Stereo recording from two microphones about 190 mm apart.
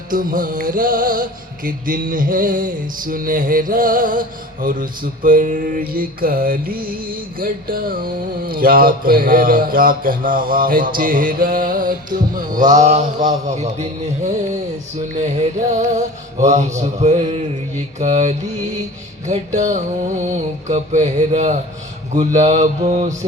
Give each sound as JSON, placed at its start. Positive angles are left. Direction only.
{"t": 0.1, "sound": "music", "side_deg": -45}
{"t": 12.5, "sound": "a sound", "side_deg": -20}
{"t": 12.7, "sound": "mantra", "side_deg": -40}
{"t": 15.2, "sound": "mantra", "side_deg": -35}